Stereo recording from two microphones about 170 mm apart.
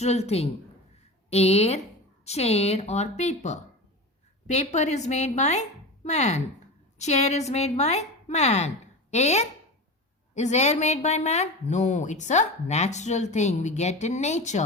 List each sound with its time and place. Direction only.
0.0 s a woman's voice: 40° left (ahead or behind)